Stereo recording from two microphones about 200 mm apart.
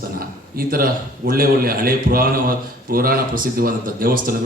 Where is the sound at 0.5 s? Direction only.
45° right (ahead or behind).